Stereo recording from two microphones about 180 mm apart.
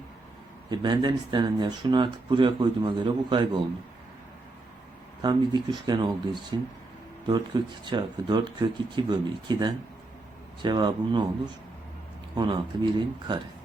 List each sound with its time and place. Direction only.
0.7 s speech: 25° right (ahead or behind)
5.2 s speech: 25° right (ahead or behind)
7.9 s speech: 25° right (ahead or behind)
12.3 s speech: 25° right (ahead or behind)